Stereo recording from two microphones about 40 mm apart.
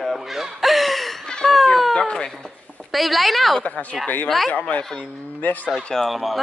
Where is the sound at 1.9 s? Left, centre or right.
Centre.